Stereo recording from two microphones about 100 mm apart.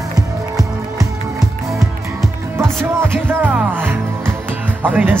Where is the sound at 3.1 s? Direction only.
20° right (ahead or behind).